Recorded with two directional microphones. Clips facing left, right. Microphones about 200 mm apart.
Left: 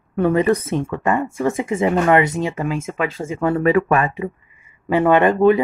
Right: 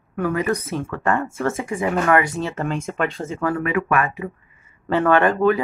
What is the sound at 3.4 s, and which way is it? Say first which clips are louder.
Speech: left 6 dB; 35° left (ahead or behind).